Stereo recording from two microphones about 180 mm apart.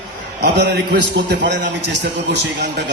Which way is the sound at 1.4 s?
75° right (ahead or behind).